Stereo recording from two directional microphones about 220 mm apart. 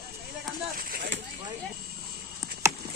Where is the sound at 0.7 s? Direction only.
45° right (ahead or behind).